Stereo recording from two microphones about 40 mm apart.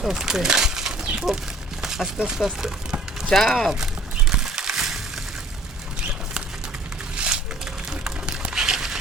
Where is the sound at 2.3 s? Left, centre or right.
Centre.